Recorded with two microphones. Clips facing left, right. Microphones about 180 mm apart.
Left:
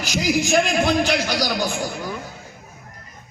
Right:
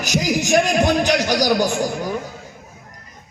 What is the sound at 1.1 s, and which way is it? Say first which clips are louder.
Speech: right 5 dB; 45° right (ahead or behind).